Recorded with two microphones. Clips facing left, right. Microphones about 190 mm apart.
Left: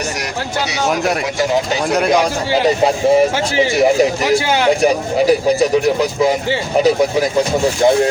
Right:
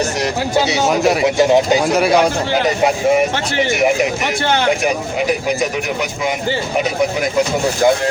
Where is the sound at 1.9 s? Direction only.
5° right (ahead or behind).